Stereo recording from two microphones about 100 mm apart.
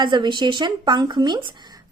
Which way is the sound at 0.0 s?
50° right (ahead or behind).